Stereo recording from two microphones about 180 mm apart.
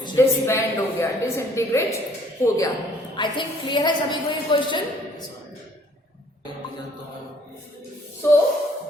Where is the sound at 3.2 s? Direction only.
25° left (ahead or behind).